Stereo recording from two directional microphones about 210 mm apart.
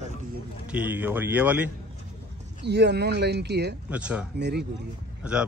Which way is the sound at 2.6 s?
55° right (ahead or behind).